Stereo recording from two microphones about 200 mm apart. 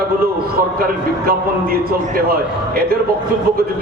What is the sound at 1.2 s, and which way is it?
A man's voice, 50° right (ahead or behind).